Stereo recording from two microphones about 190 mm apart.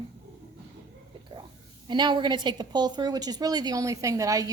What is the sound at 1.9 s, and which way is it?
A woman's voice, 25° right (ahead or behind).